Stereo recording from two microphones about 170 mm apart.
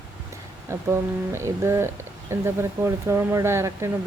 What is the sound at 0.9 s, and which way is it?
Speech, 15° right (ahead or behind).